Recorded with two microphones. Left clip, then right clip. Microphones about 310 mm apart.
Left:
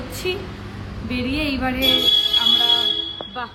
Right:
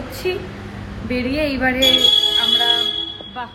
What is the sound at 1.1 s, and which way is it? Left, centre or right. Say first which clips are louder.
Speech: right 3 dB; centre.